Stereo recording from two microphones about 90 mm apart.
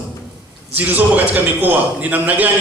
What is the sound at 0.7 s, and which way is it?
A man's voice, 20° right (ahead or behind).